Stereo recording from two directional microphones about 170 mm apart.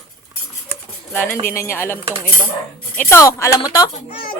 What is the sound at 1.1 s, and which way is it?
Speech, 10° left (ahead or behind).